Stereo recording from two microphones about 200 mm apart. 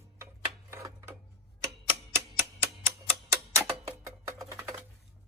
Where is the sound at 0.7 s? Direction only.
15° right (ahead or behind).